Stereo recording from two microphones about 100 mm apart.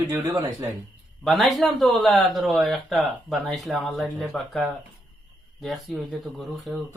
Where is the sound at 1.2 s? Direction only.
Centre (ahead or behind).